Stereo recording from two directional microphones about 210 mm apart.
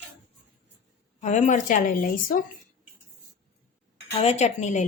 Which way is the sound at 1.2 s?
35° left (ahead or behind).